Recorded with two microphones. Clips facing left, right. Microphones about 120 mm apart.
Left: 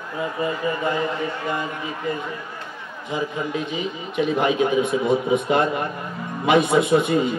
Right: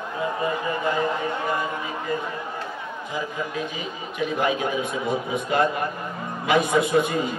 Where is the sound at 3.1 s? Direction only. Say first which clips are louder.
Left 4 dB; 20° left (ahead or behind).